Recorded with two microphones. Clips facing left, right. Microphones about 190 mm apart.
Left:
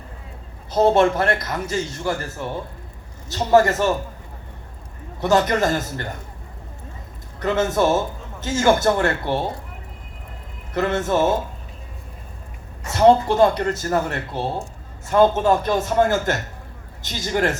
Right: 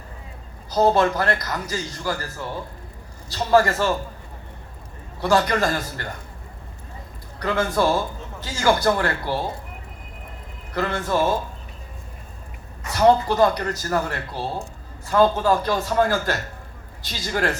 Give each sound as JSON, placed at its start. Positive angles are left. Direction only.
{"t": 0.7, "sound": "speech", "side_deg": 25}
{"t": 5.2, "sound": "speech", "side_deg": 20}
{"t": 7.3, "sound": "speech", "side_deg": 20}
{"t": 10.8, "sound": "speech", "side_deg": 20}
{"t": 12.8, "sound": "speech", "side_deg": 25}